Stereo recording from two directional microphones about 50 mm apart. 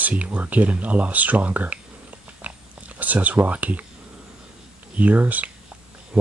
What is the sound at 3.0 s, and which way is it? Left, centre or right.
Speech, right.